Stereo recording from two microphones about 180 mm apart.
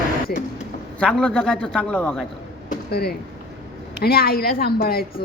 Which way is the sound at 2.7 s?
60° left (ahead or behind).